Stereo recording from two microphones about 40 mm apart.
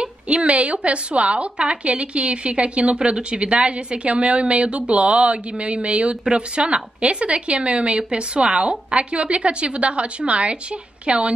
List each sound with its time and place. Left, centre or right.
0.0 s a woman's voice: right